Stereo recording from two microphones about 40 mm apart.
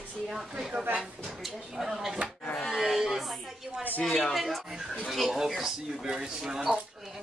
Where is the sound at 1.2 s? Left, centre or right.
Centre.